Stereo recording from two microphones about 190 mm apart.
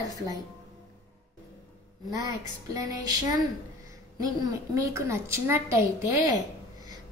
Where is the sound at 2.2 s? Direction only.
15° right (ahead or behind).